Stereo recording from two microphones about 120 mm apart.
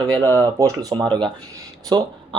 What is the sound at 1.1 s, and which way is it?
Speech, 40° right (ahead or behind).